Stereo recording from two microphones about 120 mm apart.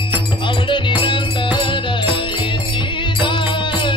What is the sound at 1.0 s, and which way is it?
Music, 45° left (ahead or behind).